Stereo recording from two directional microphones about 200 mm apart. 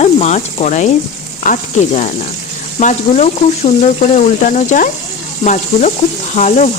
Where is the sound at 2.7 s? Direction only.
35° left (ahead or behind).